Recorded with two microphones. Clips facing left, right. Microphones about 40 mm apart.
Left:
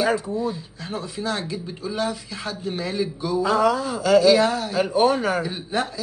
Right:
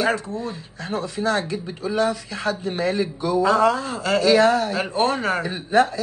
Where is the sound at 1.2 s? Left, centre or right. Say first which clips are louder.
Right 5 dB; right.